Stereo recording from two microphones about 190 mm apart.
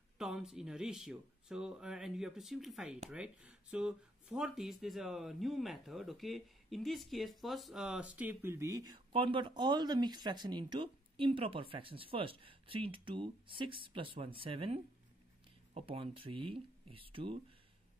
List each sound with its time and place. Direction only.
0.2 s speech: centre (ahead or behind); by 17.4 s 30° right (ahead or behind)